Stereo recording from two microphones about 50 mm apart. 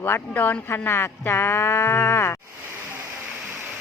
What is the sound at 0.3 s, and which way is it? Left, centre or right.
Speech, left.